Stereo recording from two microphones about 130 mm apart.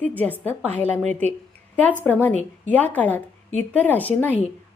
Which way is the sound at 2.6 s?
10° left (ahead or behind).